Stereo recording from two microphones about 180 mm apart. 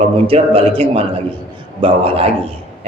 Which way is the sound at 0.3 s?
30° right (ahead or behind).